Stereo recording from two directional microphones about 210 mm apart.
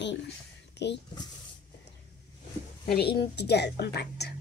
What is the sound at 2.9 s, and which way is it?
A woman's voice, 50° left (ahead or behind).